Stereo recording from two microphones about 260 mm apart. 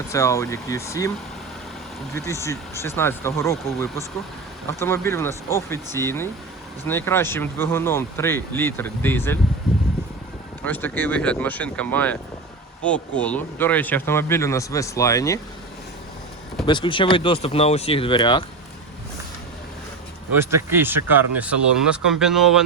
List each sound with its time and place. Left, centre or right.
0.1 s speech: centre
2.1 s speech: centre
10.6 s speech: centre
16.6 s speech: centre
20.3 s speech: centre